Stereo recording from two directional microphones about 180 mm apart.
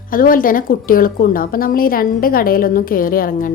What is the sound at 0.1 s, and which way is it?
Speech, 50° left (ahead or behind).